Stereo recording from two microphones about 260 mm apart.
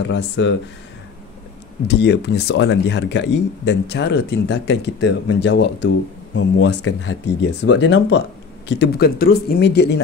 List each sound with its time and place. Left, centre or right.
0.1 s speech: left
1.9 s speech: left